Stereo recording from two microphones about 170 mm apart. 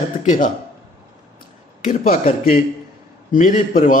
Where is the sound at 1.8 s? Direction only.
50° left (ahead or behind).